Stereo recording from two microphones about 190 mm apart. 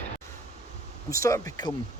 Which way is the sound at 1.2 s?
15° left (ahead or behind).